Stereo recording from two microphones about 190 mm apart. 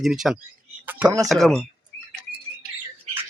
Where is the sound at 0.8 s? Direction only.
10° right (ahead or behind).